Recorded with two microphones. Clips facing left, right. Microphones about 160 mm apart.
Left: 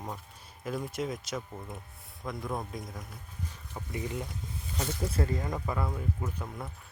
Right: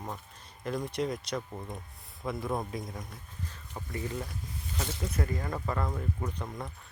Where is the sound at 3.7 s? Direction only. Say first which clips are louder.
Even; 15° left (ahead or behind).